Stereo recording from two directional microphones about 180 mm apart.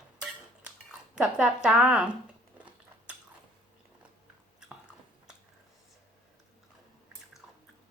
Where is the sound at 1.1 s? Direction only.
5° right (ahead or behind).